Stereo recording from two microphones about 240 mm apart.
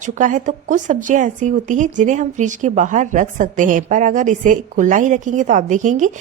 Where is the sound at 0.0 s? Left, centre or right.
Right.